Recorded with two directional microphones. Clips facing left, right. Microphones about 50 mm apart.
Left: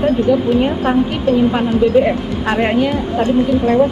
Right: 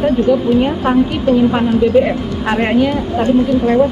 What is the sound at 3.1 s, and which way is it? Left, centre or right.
Speech, centre.